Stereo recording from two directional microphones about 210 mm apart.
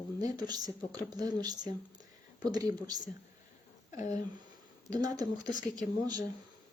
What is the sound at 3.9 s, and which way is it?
Speech, 35° left (ahead or behind).